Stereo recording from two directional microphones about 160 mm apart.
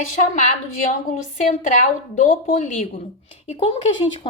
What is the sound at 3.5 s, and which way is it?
Speech, 40° left (ahead or behind).